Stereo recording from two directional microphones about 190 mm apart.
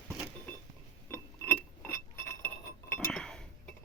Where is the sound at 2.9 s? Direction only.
5° left (ahead or behind).